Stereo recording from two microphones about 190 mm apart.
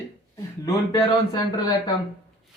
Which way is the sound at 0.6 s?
20° left (ahead or behind).